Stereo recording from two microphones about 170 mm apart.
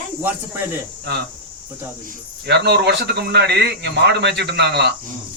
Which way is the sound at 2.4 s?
80° right.